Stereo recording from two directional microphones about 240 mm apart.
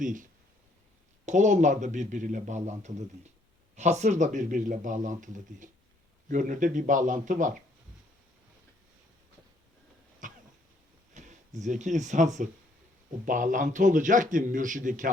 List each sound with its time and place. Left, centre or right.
0.0 s speech: right
10.2 s cough: right
11.1 s speech: right